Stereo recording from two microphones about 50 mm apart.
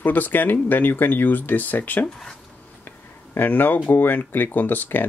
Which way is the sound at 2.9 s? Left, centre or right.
Left.